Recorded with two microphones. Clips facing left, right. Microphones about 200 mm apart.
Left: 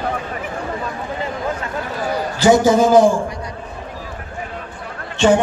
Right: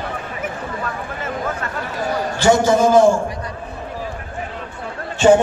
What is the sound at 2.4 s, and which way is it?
Speech, 20° left (ahead or behind).